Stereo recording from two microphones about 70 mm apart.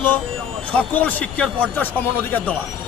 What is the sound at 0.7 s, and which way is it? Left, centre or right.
A man's voice, left.